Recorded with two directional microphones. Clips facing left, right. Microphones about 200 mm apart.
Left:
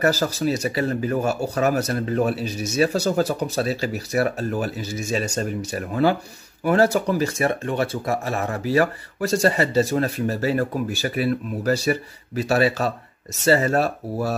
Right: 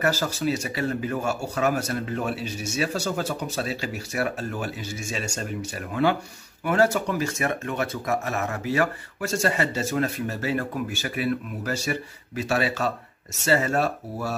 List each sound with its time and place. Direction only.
0.0 s speech: 40° left (ahead or behind)